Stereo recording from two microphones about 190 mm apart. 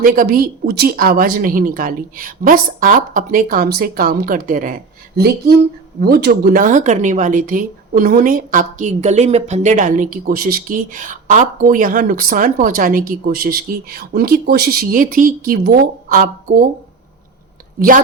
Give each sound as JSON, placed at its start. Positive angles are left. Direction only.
{"t": 0.0, "sound": "speech", "side_deg": -50}
{"t": 17.7, "sound": "a woman's voice", "side_deg": -45}